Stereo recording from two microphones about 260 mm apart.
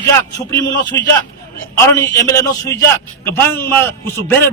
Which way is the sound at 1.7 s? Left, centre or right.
Centre.